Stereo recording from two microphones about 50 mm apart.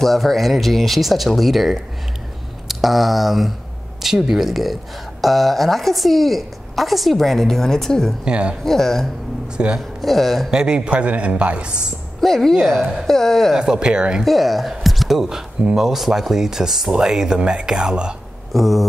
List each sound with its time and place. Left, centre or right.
0.0 s a woman's voice: centre
8.3 s a man's voice: right
8.6 s a woman's voice: centre
10.5 s a man's voice: centre
12.2 s a woman's voice: centre
13.6 s speech: centre
14.2 s speech: centre
18.5 s a woman's voice: centre